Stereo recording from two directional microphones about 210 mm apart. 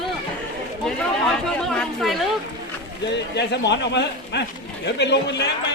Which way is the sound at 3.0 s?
55° left (ahead or behind).